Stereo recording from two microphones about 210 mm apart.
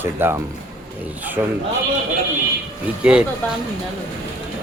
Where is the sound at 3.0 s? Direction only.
5° right (ahead or behind).